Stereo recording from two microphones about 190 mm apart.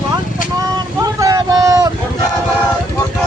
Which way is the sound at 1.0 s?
20° right (ahead or behind).